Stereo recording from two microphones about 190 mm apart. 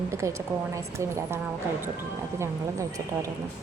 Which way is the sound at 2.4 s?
15° right (ahead or behind).